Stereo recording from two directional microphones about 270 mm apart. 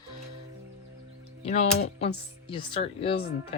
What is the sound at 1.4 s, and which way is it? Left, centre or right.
Speech, left.